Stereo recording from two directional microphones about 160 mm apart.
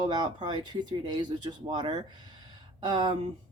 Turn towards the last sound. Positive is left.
turn(degrees=-25)  # may be behind; listen again after turning